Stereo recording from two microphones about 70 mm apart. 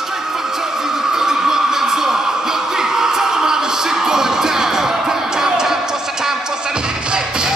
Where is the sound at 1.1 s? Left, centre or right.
Centre.